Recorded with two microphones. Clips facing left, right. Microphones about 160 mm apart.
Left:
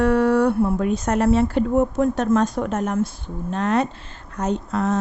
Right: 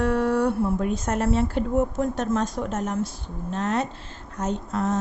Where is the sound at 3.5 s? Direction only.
65° left (ahead or behind).